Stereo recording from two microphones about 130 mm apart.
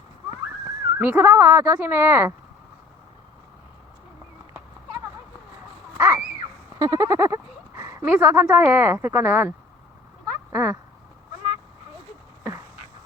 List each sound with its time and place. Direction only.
0.9 s speech: 10° right (ahead or behind)
6.0 s a sound: 20° right (ahead or behind)
8.0 s speech: 10° right (ahead or behind)
10.5 s speech: 20° right (ahead or behind)